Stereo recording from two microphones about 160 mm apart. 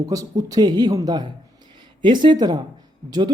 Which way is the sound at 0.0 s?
20° right (ahead or behind).